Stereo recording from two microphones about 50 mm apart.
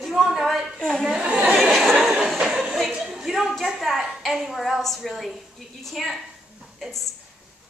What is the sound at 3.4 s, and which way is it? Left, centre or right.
A woman's voice, centre.